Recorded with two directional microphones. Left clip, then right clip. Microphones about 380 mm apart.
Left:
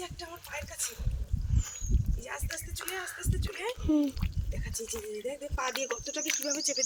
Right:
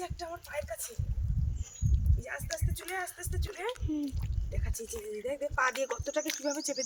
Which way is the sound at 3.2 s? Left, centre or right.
Centre.